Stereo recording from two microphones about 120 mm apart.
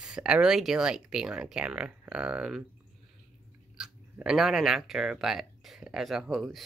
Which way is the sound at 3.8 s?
5° right (ahead or behind).